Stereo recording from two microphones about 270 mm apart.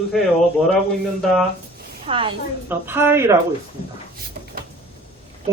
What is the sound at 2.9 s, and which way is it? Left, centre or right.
Speech, centre.